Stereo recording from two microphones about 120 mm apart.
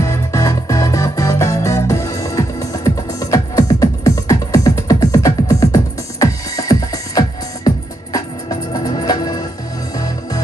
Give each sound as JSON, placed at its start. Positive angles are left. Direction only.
{"t": 0.0, "sound": "music", "side_deg": 25}